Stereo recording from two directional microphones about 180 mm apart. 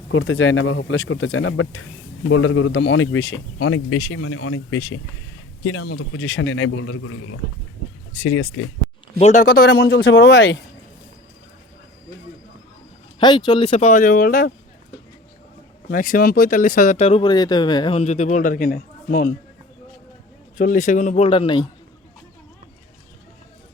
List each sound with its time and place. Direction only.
0.1 s speech: 90° left
5.6 s speech: 90° left
8.2 s speech: 90° left
9.1 s speech: 40° left (ahead or behind); by 10.6 s 75° left (ahead or behind)
13.1 s a man's voice: 25° left (ahead or behind); by 14.5 s 50° left (ahead or behind)
15.9 s speech: 50° left (ahead or behind); by 17.2 s 35° left (ahead or behind)
17.2 s a man's voice: 20° left (ahead or behind); by 19.3 s 50° left (ahead or behind)
20.6 s speech: 45° left (ahead or behind)
21.2 s a man's voice: 30° left (ahead or behind)